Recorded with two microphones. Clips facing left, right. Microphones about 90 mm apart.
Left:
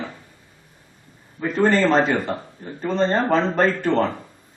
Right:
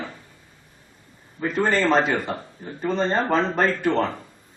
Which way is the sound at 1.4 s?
15° left (ahead or behind).